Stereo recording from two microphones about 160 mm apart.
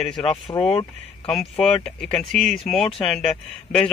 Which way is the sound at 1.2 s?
5° left (ahead or behind).